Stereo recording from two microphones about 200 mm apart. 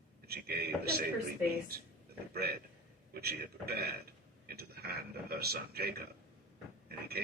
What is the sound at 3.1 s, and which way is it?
A man's voice, 50° right (ahead or behind).